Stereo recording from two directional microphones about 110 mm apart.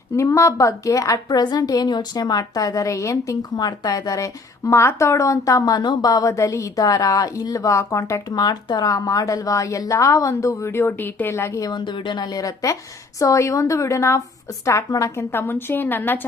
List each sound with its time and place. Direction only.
0.2 s a woman's voice: 25° left (ahead or behind)
11.7 s a woman's voice: 45° left (ahead or behind); by 16.2 s 15° left (ahead or behind)